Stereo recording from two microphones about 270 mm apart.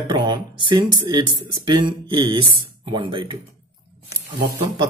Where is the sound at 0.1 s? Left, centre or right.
Centre.